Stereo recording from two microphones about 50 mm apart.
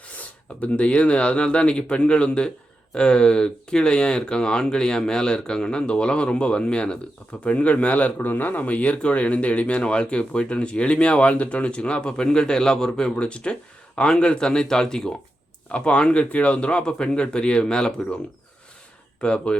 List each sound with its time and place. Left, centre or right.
0.2 s a man's voice: left
19.2 s a man's voice: centre